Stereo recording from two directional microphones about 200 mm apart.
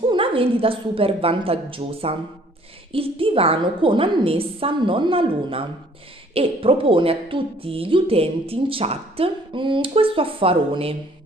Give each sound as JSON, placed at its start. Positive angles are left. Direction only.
{"t": 0.0, "sound": "a woman's voice", "side_deg": -25}